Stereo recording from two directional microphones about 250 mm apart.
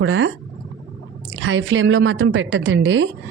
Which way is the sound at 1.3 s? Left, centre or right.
Right.